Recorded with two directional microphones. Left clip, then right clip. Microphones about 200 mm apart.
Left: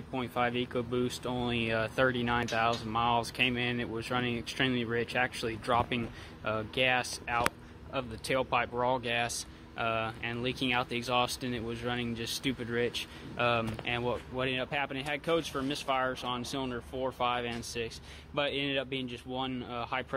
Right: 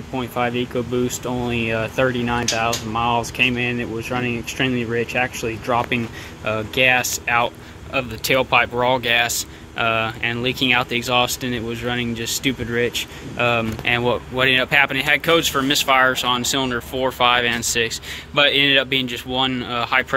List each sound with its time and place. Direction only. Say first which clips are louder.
0.1 s speech: right 9 dB; centre (ahead or behind)